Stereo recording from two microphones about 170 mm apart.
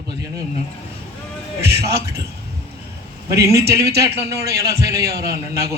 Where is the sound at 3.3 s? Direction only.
20° right (ahead or behind).